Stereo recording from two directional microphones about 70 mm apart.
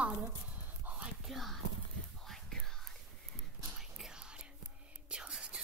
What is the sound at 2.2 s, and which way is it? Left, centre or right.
Whispering, centre.